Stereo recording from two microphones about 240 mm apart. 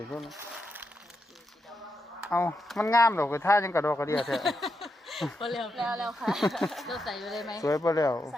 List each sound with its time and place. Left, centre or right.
0.1 s speech: centre
0.3 s a sound: centre
2.3 s speech: centre
4.2 s a sound: centre
5.5 s speech: centre
7.5 s speech: centre